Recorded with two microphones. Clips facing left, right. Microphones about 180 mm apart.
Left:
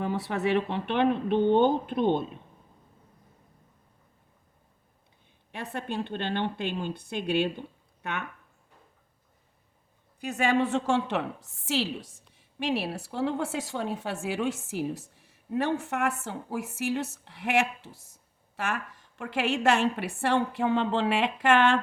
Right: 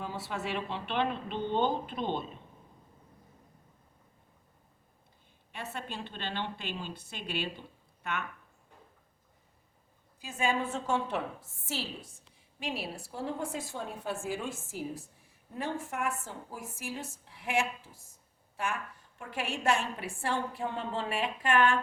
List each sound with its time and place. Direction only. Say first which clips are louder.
0.0 s speech: left 8 dB; 60° left (ahead or behind)
5.7 s speech: left 11 dB; 55° left (ahead or behind)
10.2 s speech: left 6 dB; 70° left (ahead or behind)